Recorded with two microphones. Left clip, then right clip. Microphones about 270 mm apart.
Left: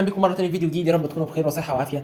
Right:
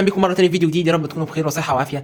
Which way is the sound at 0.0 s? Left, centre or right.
Right.